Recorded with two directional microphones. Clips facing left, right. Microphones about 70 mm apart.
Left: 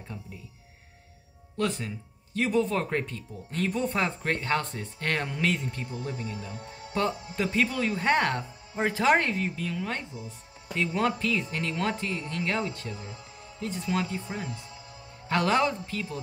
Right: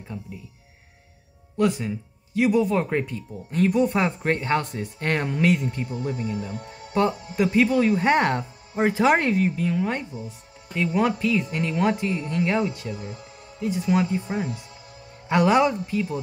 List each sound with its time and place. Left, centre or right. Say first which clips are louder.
1.6 s speech: right 7 dB; centre
5.9 s speech: right 6 dB; right
6.9 s speech: right 6 dB; centre
12.9 s speech: right 5 dB; left
13.6 s speech: right 8 dB; centre
13.8 s speech: right 7 dB; centre
15.2 s speech: right 6 dB; centre